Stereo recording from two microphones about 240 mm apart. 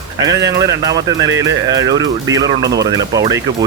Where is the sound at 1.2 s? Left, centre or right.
Right.